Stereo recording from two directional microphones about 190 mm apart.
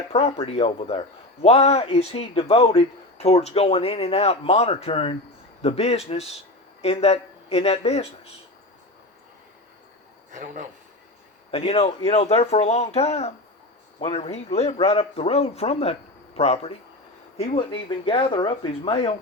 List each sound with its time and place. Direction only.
0.1 s a man's voice: 35° left (ahead or behind)
10.3 s a man's voice: 40° right (ahead or behind)
11.5 s a man's voice: 30° left (ahead or behind)